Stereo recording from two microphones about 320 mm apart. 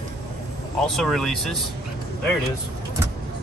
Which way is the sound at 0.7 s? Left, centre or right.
Centre.